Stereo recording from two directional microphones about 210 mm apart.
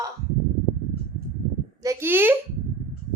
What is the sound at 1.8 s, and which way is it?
Speech, 10° right (ahead or behind).